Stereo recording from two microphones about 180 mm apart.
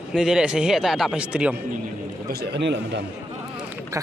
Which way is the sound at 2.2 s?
65° right (ahead or behind).